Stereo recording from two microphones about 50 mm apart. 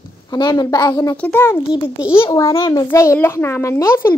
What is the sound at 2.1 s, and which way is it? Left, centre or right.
A child's voice, left.